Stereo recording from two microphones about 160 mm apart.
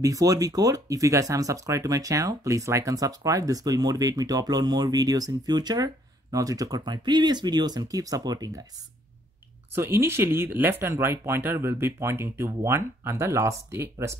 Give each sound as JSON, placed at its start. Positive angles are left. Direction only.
{"t": 0.0, "sound": "speech", "side_deg": -20}
{"t": 9.8, "sound": "speech", "side_deg": -15}